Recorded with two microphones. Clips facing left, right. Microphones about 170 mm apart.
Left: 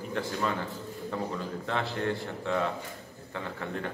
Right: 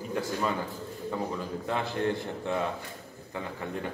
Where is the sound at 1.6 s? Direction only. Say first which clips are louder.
Right 2 dB; 15° right (ahead or behind).